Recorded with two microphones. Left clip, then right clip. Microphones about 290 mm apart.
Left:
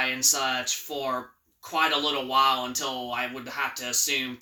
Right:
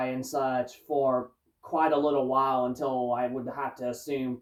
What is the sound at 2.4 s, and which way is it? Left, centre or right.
Speech, left.